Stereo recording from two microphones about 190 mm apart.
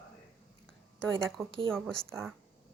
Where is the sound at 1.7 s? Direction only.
5° left (ahead or behind).